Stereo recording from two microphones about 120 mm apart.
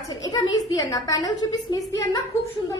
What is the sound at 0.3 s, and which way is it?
A woman's voice, 30° left (ahead or behind).